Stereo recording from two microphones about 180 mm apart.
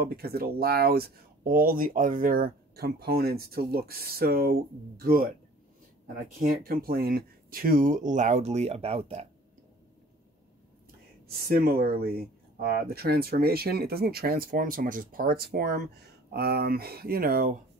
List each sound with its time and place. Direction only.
0.0 s speech: 60° right (ahead or behind)
6.4 s speech: 55° right (ahead or behind); by 9.2 s 35° right (ahead or behind)
11.2 s speech: 55° right (ahead or behind)